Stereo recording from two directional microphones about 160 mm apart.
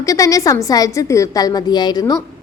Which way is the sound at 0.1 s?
20° left (ahead or behind).